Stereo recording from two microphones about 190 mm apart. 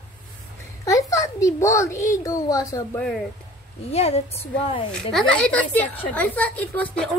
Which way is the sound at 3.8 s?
30° left (ahead or behind).